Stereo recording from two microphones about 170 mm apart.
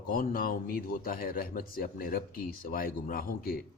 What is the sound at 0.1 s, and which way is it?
A man's voice, 55° left (ahead or behind).